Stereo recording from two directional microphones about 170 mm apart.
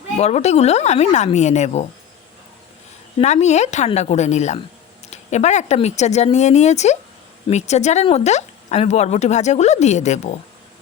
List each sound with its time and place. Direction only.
0.2 s speech: 40° left (ahead or behind)
3.2 s speech: 40° left (ahead or behind)